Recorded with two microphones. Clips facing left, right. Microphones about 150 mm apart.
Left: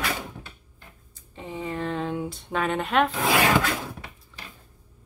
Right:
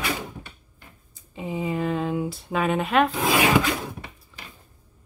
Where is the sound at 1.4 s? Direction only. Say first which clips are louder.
Right 4 dB; 10° right (ahead or behind).